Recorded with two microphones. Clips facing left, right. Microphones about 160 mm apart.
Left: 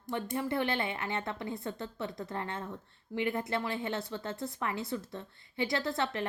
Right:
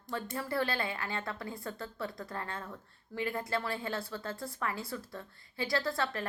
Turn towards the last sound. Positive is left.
turn(degrees=20)  # may be behind; listen again after turning